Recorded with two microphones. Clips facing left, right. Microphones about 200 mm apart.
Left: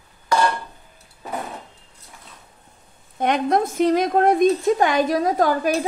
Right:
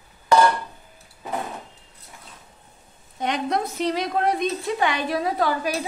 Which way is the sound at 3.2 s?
50° left (ahead or behind).